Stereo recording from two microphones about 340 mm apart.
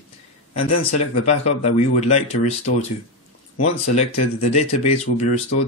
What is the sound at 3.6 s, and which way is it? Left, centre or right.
Speech, centre.